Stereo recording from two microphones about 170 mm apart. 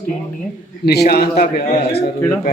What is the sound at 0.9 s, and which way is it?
A man's voice, 70° left (ahead or behind).